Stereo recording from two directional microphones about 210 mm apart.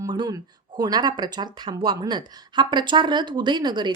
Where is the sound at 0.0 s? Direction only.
20° right (ahead or behind).